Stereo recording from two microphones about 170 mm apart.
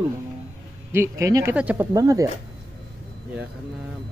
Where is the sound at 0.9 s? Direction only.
15° right (ahead or behind).